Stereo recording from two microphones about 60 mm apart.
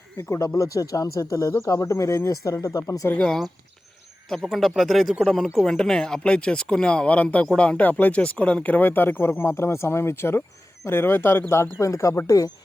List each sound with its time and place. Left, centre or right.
0.2 s speech: left
0.4 s speech: left
3.2 s speech: centre
8.6 s speech: left
9.4 s speech: left